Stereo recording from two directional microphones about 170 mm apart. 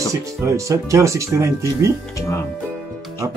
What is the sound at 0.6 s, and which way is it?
Speech, 20° right (ahead or behind).